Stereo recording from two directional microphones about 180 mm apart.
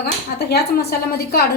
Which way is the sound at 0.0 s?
60° left (ahead or behind).